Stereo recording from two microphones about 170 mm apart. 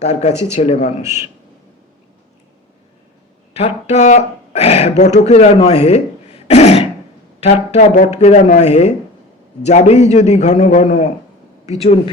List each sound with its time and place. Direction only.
0.0 s speech: 40° left (ahead or behind)
3.5 s speech: 40° left (ahead or behind)
6.5 s throat clearing: 35° left (ahead or behind)
7.3 s a man's voice: 40° left (ahead or behind)